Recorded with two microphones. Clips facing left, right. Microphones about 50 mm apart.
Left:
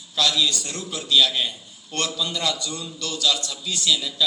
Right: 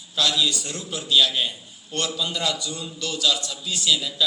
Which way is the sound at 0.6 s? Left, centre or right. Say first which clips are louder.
Even; left.